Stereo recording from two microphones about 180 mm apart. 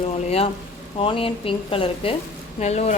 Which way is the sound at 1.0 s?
30° left (ahead or behind).